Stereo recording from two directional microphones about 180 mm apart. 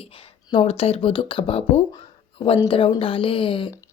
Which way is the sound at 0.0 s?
30° left (ahead or behind).